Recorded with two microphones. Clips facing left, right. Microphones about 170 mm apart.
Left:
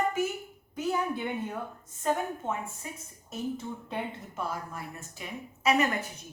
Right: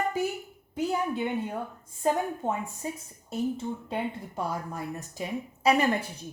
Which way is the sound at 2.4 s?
35° right (ahead or behind).